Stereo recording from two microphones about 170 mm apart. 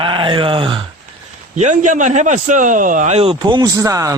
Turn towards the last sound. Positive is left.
turn(degrees=-20)  # may be behind; listen again after turning